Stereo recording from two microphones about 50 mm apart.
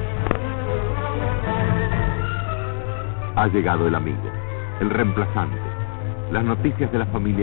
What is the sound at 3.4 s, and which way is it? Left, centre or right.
A man's voice, right.